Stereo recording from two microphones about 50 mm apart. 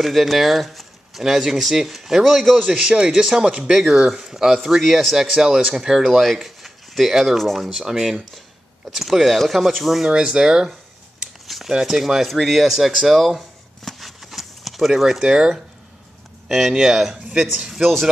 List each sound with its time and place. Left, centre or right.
0.0 s speech: centre
2.7 s speech: centre
5.5 s speech: right; by 10.1 s centre
10.1 s speech: centre
11.4 s a sound: centre
11.7 s speech: centre
13.8 s a sound: centre
16.4 s speech: centre